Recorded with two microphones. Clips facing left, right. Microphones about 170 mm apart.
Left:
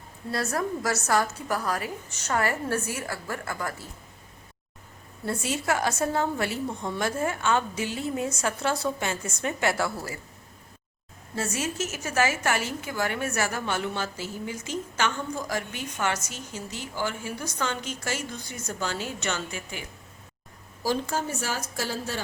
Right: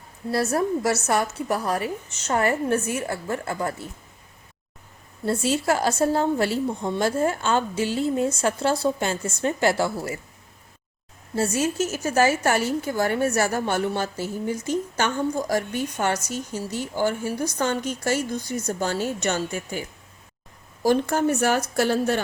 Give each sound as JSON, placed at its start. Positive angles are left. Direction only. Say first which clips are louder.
{"t": 0.3, "sound": "a woman's voice", "louder": "right 6 dB", "side_deg": -25}
{"t": 5.2, "sound": "a woman's voice", "louder": "right 6 dB", "side_deg": -30}
{"t": 11.3, "sound": "a woman's voice", "louder": "right 7 dB", "side_deg": -30}
{"t": 20.8, "sound": "speech", "louder": "right 8 dB", "side_deg": -60}